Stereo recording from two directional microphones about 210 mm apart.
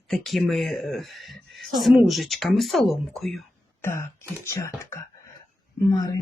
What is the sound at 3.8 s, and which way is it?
Throat clearing, 10° left (ahead or behind).